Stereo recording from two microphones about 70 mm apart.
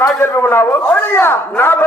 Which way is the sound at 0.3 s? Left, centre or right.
Left.